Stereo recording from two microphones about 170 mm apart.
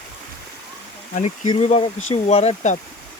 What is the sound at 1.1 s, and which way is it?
Speech, 45° left (ahead or behind).